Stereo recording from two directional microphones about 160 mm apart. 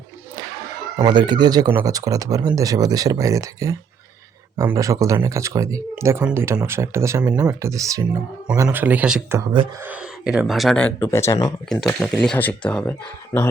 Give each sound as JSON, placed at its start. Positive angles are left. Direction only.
{"t": 0.9, "sound": "speech", "side_deg": -30}
{"t": 11.7, "sound": "speech", "side_deg": 0}